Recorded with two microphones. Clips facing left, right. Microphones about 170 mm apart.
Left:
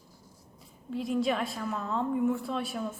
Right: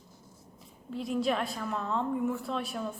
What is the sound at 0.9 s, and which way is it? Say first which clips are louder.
A woman's voice: left 1 dB; centre (ahead or behind).